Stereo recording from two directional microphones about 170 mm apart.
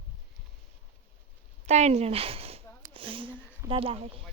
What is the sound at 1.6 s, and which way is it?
Speech, 40° right (ahead or behind).